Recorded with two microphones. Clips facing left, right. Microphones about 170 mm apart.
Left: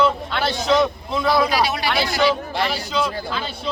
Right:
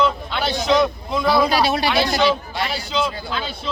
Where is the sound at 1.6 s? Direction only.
30° right (ahead or behind).